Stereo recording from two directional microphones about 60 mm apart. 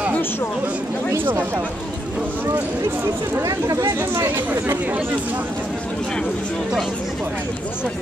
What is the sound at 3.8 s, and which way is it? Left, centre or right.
Speech, right.